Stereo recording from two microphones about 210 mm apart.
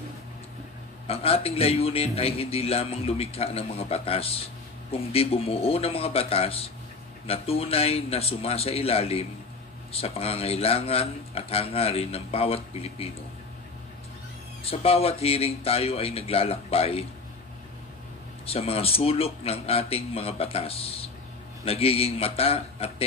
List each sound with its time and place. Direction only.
1.0 s a man's voice: 30° left (ahead or behind)
14.6 s a man's voice: 25° left (ahead or behind)
18.4 s a man's voice: 30° left (ahead or behind)